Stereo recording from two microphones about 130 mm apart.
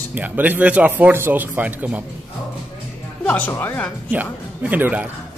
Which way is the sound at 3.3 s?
15° left (ahead or behind).